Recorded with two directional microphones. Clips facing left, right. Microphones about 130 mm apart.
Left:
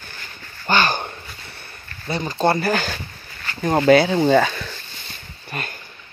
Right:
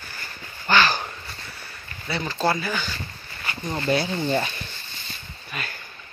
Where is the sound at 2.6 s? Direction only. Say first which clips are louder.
Left 7 dB; 75° left (ahead or behind); by 4.7 s 90° left.